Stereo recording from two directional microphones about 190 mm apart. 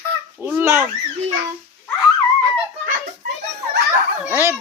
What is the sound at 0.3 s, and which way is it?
Babbling, 10° right (ahead or behind).